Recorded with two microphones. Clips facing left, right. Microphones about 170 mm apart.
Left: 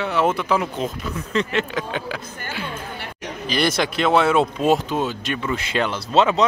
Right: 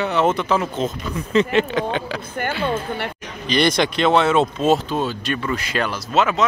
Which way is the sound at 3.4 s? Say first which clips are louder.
Right 3 dB; 5° left (ahead or behind).